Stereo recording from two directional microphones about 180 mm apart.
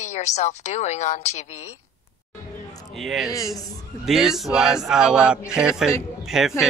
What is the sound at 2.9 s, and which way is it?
Speech, centre (ahead or behind).